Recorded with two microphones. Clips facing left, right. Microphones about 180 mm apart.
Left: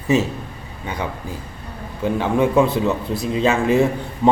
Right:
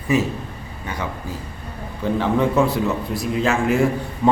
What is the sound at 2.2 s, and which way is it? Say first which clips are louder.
A man's voice: left 2 dB; 15° left (ahead or behind).